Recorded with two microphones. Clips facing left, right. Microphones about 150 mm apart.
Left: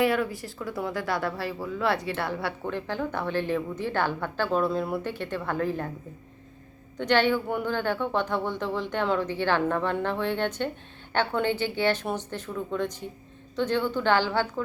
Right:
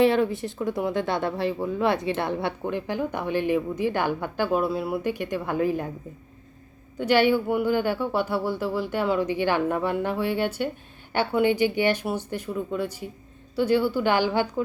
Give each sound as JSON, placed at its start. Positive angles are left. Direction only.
{"t": 0.0, "sound": "speech", "side_deg": -25}
{"t": 6.9, "sound": "speech", "side_deg": -10}